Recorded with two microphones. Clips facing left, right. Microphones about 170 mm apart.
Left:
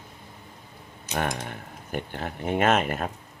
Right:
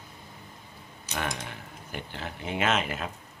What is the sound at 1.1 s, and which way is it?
Speech, 50° left (ahead or behind).